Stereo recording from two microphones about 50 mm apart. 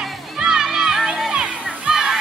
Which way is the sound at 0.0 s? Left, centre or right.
Centre.